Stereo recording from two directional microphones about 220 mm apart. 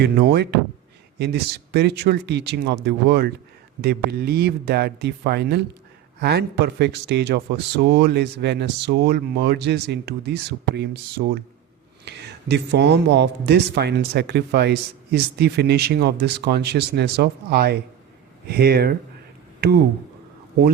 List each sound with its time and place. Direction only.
0.0 s a man's voice: 50° right (ahead or behind)